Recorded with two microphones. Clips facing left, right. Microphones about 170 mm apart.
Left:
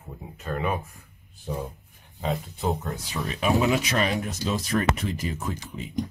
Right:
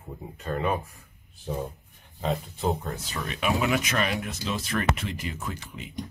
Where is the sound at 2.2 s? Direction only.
Centre (ahead or behind).